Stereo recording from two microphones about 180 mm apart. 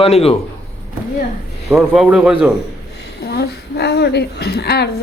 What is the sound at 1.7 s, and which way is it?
Speech, centre (ahead or behind).